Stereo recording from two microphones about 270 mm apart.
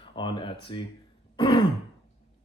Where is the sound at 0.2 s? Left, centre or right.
Centre.